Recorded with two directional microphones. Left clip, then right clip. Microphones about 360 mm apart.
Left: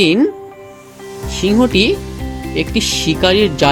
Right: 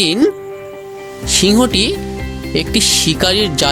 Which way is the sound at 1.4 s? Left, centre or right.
Right.